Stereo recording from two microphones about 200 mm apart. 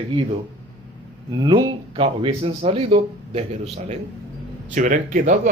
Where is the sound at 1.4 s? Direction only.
20° right (ahead or behind).